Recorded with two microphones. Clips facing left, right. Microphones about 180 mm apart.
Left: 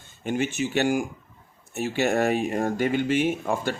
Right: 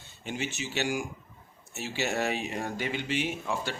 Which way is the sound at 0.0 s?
55° left (ahead or behind).